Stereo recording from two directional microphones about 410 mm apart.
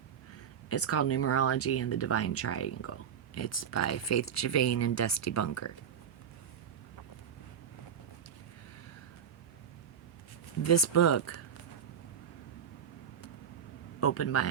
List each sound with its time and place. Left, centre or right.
0.7 s speech: left
10.6 s speech: left
14.0 s speech: left